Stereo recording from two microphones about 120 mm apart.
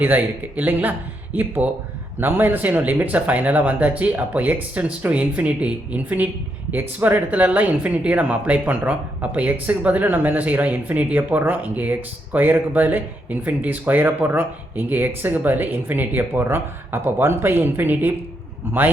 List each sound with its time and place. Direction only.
0.0 s speech: 15° right (ahead or behind)